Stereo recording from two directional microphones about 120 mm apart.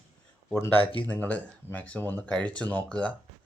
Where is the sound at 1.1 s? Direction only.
15° left (ahead or behind).